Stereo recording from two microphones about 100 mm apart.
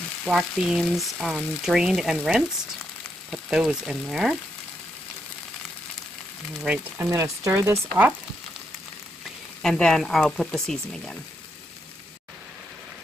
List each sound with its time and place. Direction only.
0.2 s frying: 5° right (ahead or behind)
6.7 s speech: 25° right (ahead or behind)
9.6 s frying: 5° left (ahead or behind)